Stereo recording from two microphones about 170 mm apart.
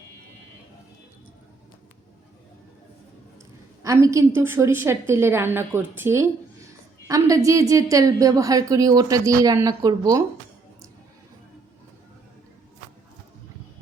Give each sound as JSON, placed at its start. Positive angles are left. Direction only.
{"t": 3.8, "sound": "a woman's voice", "side_deg": -20}